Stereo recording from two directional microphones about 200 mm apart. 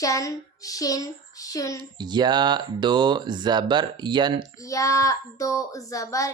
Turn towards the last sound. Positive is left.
turn(degrees=15)  # may be behind; listen again after turning